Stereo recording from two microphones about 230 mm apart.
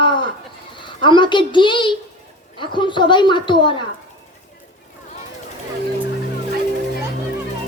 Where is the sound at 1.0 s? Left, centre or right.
Centre.